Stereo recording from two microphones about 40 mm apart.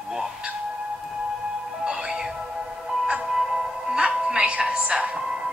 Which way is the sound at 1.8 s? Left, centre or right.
Right.